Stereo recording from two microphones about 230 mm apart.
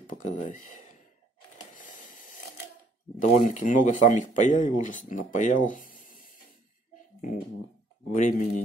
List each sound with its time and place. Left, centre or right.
0.1 s speech: left
1.7 s a sound: left
3.2 s speech: left
5.7 s rub: left
8.1 s speech: left